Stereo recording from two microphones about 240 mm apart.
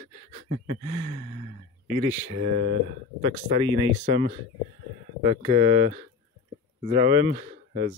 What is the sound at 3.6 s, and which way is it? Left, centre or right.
Speech, centre.